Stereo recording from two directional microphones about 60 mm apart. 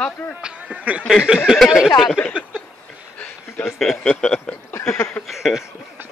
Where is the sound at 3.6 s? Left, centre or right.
Centre.